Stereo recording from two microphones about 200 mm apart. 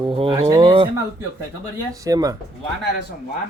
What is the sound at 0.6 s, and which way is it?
Speech, 25° right (ahead or behind).